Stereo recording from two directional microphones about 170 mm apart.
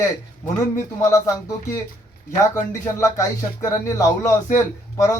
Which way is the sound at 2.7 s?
20° left (ahead or behind).